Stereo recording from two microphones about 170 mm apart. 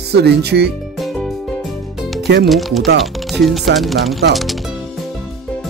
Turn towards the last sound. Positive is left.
turn(degrees=0)  # may be behind; listen again after turning